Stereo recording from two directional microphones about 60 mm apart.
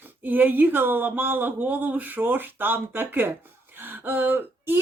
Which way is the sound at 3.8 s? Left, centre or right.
Right.